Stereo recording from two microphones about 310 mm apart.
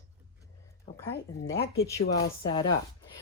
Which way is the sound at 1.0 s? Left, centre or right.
Centre.